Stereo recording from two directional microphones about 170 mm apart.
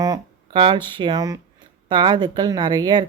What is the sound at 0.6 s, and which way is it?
Speech, 25° right (ahead or behind).